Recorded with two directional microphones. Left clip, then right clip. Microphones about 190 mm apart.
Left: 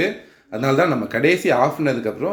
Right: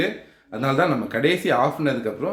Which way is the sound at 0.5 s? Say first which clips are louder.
Left 3 dB; 15° left (ahead or behind).